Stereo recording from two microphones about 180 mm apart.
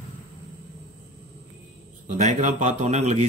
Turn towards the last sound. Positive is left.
turn(degrees=-40)  # may be behind; listen again after turning